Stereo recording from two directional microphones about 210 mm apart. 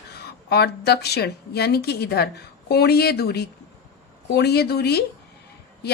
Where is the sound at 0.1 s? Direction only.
50° left (ahead or behind).